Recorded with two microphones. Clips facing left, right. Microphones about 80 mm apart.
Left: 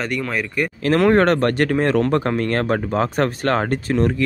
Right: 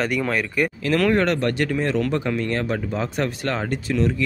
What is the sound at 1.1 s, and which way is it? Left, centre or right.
Speech, left.